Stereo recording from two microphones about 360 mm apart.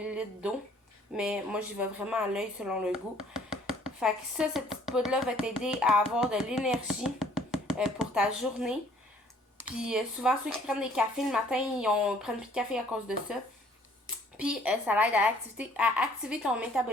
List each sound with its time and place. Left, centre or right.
0.0 s a sound: centre
1.1 s speech: centre
3.3 s a sound: centre
4.0 s speech: centre
9.8 s speech: centre
14.3 s speech: centre